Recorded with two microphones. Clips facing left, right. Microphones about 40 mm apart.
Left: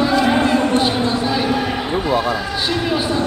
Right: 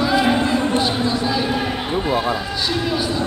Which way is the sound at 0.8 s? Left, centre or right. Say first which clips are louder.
Left 2 dB; left.